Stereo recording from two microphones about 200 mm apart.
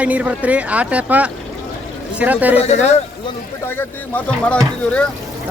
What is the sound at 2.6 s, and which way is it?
Speech, 35° left (ahead or behind).